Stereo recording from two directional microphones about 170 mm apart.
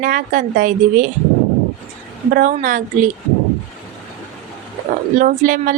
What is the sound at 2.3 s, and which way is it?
Speech, 55° right (ahead or behind).